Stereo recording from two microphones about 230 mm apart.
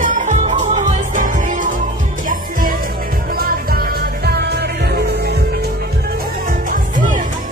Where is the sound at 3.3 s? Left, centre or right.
Right.